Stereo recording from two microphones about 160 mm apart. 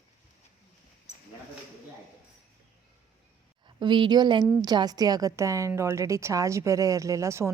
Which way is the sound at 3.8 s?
30° right (ahead or behind).